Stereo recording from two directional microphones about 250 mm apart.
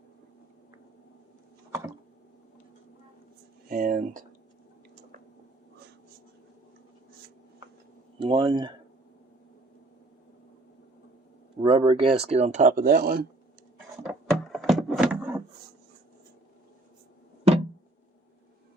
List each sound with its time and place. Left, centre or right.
3.7 s speech: right
8.2 s speech: centre
11.6 s speech: right
14.0 s a sound: centre